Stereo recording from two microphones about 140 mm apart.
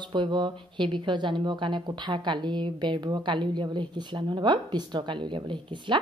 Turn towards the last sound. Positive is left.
turn(degrees=-35)  # may be behind; listen again after turning